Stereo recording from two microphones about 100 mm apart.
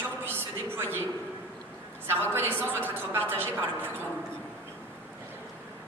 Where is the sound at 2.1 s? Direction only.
20° right (ahead or behind).